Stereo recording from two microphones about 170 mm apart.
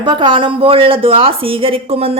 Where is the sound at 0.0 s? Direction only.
30° right (ahead or behind).